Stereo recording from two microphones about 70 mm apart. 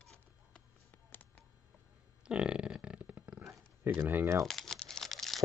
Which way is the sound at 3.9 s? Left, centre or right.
Right.